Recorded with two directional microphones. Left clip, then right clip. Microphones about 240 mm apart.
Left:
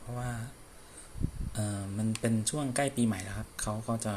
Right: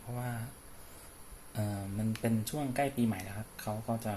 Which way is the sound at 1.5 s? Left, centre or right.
Centre.